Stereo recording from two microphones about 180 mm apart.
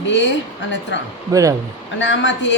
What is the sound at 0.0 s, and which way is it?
Speech, 85° left.